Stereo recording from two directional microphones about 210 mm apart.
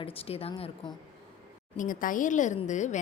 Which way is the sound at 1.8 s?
40° left (ahead or behind).